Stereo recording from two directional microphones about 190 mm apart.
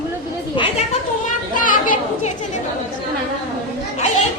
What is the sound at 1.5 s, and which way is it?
Speech, 45° left (ahead or behind).